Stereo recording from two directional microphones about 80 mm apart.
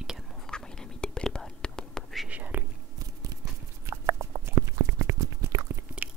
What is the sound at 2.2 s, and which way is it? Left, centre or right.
Whispering, right.